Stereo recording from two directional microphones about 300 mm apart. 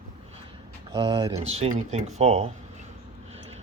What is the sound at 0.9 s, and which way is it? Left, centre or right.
Speech, centre.